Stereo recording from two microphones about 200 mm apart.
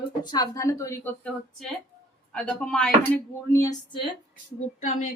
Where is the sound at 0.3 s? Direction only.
20° left (ahead or behind).